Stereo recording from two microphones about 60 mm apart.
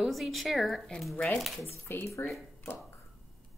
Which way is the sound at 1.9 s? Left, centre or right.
Left.